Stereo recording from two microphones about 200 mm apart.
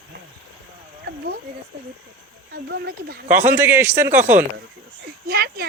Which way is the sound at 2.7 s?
55° right (ahead or behind).